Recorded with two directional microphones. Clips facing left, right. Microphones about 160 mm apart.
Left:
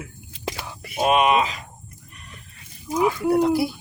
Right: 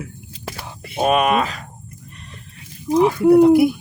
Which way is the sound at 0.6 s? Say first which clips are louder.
Right 8 dB; 25° right (ahead or behind).